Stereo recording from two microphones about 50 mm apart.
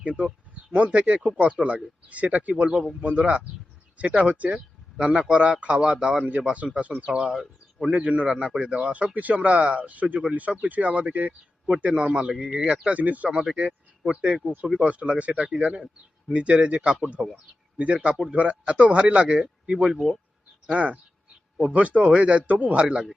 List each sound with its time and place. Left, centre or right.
0.0 s speech: right
4.5 s a sound: centre
5.3 s speech: right
7.0 s a man's voice: centre; by 11.7 s right
11.8 s a man's voice: right
13.3 s a man's voice: centre
15.4 s a man's voice: centre
15.6 s speech: right
17.2 s a man's voice: centre
17.7 s speech: right
19.9 s speech: centre
20.7 s speech: right